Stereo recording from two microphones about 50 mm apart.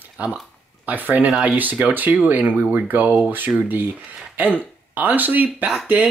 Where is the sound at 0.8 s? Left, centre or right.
Right.